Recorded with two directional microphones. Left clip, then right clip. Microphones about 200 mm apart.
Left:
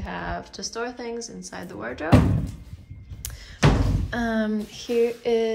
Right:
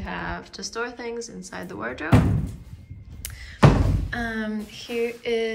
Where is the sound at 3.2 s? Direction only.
20° left (ahead or behind).